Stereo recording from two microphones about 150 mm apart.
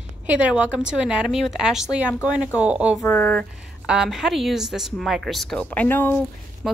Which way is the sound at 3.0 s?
10° left (ahead or behind).